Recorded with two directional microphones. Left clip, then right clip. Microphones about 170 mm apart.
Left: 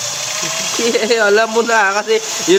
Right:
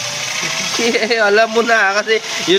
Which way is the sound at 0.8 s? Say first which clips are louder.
Left 1 dB; 25° left (ahead or behind).